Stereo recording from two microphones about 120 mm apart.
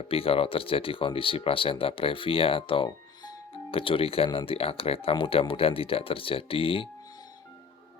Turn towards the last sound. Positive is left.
turn(degrees=50)  # may be behind; listen again after turning